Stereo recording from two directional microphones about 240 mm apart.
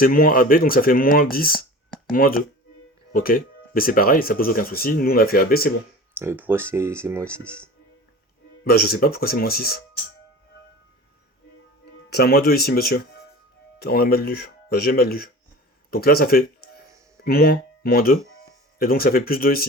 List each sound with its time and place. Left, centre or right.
0.0 s speech: left
6.1 s speech: centre
8.6 s speech: left
12.1 s speech: left